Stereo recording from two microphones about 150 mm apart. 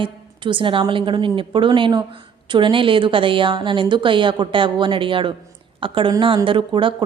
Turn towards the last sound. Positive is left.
turn(degrees=-35)  # may be behind; listen again after turning